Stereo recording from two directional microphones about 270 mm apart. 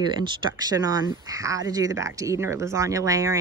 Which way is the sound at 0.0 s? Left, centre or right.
Centre.